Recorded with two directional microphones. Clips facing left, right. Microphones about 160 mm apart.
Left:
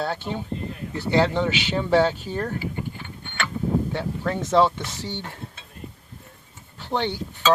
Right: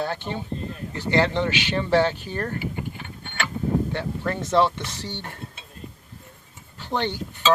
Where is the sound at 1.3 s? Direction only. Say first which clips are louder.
Left 1 dB; 5° left (ahead or behind).